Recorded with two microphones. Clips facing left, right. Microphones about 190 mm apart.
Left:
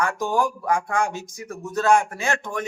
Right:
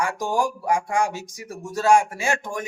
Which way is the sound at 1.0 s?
55° left (ahead or behind).